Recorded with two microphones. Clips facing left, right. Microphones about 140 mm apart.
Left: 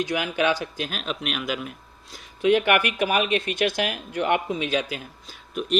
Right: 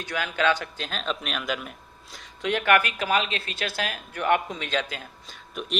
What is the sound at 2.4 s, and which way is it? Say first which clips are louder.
Speech: left 3 dB; 15° left (ahead or behind).